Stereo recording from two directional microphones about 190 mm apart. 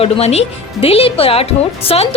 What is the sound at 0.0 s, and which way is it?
Speech, 35° left (ahead or behind).